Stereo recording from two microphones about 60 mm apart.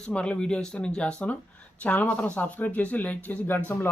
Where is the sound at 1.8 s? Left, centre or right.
Left.